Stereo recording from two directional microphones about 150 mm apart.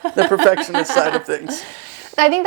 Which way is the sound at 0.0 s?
20° right (ahead or behind).